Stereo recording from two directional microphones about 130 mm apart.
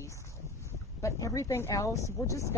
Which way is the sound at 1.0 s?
25° left (ahead or behind).